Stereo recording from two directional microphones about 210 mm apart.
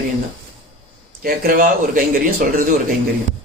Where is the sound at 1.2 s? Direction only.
45° right (ahead or behind).